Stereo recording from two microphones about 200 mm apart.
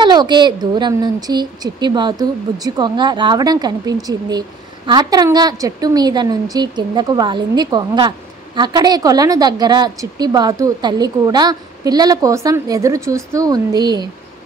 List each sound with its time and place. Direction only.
0.0 s a woman's voice: 20° right (ahead or behind)